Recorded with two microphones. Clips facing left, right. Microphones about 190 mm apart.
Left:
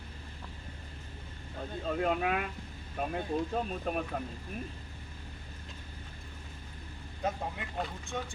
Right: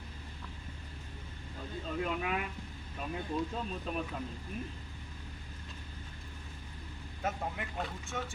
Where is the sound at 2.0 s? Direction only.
55° left (ahead or behind).